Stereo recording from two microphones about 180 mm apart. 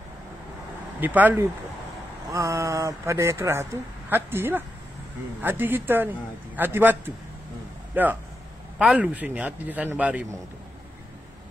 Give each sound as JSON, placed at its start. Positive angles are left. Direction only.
{"t": 1.0, "sound": "a man's voice", "side_deg": -10}